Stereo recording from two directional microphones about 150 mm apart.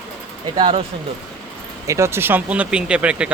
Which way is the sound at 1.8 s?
20° right (ahead or behind).